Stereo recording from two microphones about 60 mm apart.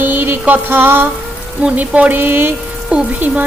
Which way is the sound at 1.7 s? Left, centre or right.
Right.